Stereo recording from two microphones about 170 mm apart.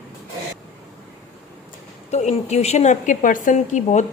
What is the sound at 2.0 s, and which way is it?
Speech, 40° left (ahead or behind).